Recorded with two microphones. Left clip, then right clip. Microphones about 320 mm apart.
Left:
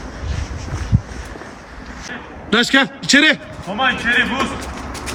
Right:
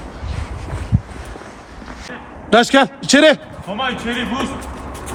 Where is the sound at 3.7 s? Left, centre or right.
Left.